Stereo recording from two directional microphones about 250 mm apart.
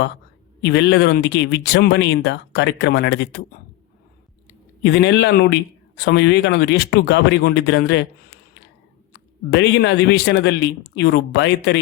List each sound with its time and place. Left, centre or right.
0.6 s speech: left
4.8 s speech: left
9.5 s speech: left